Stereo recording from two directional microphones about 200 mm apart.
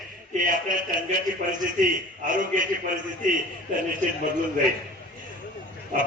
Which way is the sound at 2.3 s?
40° right (ahead or behind).